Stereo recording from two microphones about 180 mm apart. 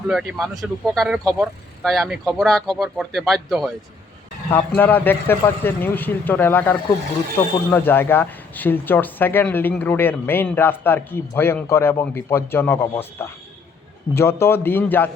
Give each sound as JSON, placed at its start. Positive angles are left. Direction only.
{"t": 0.1, "sound": "speech", "side_deg": 0}
{"t": 4.5, "sound": "speech", "side_deg": 10}